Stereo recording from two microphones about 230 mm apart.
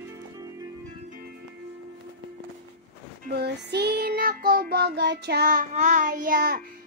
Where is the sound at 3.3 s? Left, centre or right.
Right.